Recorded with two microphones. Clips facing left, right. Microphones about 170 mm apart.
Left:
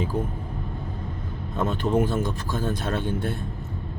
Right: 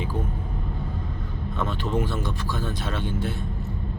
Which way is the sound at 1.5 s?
40° left (ahead or behind).